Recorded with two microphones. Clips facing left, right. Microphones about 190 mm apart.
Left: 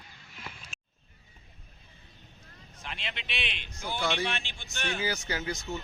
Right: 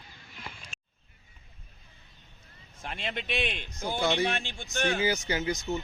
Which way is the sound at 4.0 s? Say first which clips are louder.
Right 4 dB; 20° right (ahead or behind).